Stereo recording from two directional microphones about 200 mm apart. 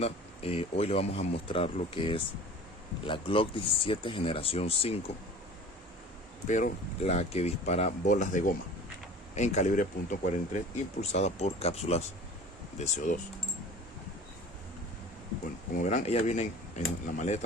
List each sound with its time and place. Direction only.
0.0 s speech: 30° left (ahead or behind)
6.5 s speech: 35° left (ahead or behind)
15.8 s speech: 35° left (ahead or behind)